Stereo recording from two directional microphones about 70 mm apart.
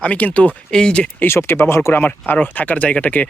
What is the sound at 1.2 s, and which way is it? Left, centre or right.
Speech, left.